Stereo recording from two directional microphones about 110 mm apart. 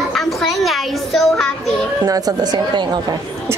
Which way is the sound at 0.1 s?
Centre (ahead or behind).